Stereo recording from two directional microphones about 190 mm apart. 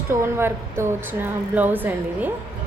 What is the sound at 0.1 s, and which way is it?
Speech, 15° right (ahead or behind).